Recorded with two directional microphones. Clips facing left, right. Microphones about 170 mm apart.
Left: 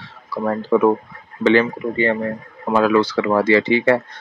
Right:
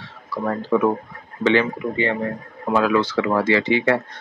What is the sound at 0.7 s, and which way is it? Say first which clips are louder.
Speech: left 4 dB; 40° left (ahead or behind).